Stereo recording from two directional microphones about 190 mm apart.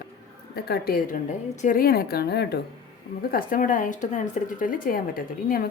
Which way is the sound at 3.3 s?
45° left (ahead or behind).